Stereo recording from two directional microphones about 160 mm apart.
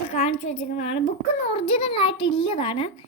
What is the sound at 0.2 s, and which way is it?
A woman's voice, 40° left (ahead or behind).